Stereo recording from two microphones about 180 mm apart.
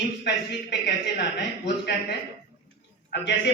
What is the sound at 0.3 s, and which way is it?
A man's voice, 75° left (ahead or behind).